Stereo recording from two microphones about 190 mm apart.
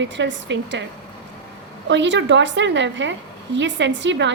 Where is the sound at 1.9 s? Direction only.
70° right (ahead or behind).